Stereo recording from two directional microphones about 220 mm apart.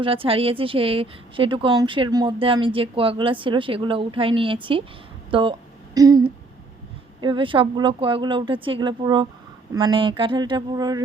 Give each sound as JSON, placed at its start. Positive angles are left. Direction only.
{"t": 0.0, "sound": "a woman's voice", "side_deg": -25}